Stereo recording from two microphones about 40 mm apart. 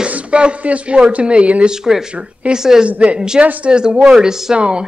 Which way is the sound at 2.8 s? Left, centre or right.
Right.